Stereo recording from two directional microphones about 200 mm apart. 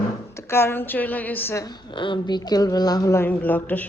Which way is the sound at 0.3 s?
10° left (ahead or behind).